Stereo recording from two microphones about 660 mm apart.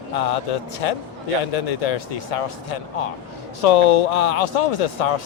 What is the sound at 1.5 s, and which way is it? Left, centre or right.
Speech, left.